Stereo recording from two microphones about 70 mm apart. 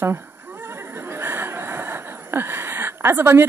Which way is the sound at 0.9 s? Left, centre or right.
Right.